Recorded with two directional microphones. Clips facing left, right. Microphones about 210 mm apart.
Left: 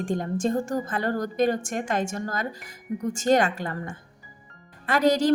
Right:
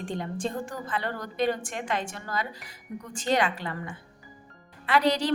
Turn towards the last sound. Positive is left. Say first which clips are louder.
# left 3 dB
turn(degrees=45)  # may be behind; listen again after turning